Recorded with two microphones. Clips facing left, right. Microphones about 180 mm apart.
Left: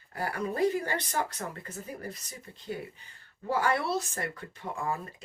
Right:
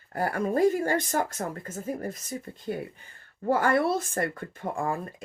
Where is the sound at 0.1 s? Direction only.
50° right (ahead or behind).